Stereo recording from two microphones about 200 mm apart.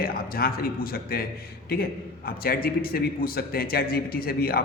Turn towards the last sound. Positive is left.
turn(degrees=50)  # may be behind; listen again after turning